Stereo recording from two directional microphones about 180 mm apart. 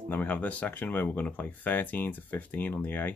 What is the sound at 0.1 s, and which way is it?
Speech, 10° left (ahead or behind).